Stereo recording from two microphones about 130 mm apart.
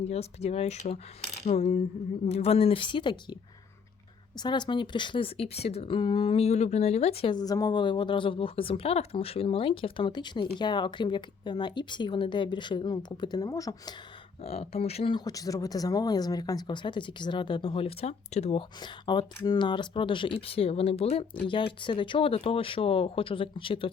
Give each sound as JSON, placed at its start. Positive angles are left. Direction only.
{"t": 0.0, "sound": "speech", "side_deg": 55}
{"t": 4.4, "sound": "speech", "side_deg": 35}
{"t": 7.3, "sound": "a woman's voice", "side_deg": 30}
{"t": 14.4, "sound": "speech", "side_deg": 50}
{"t": 15.1, "sound": "a woman's voice", "side_deg": 30}
{"t": 18.8, "sound": "a woman's voice", "side_deg": 35}